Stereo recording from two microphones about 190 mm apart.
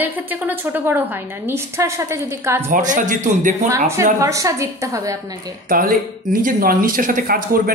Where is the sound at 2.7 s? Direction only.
40° right (ahead or behind).